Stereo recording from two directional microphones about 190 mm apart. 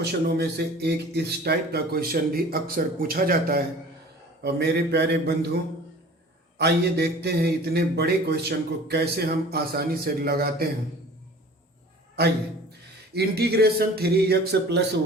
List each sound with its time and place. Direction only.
0.0 s a man's voice: 60° right (ahead or behind)
6.6 s a man's voice: 60° right (ahead or behind)
13.1 s a man's voice: 55° right (ahead or behind)